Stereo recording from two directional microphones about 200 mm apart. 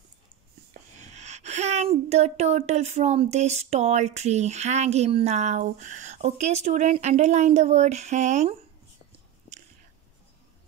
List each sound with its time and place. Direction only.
0.9 s speech: 35° right (ahead or behind)